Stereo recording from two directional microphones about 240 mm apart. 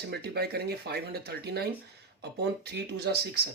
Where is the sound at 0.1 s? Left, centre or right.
Right.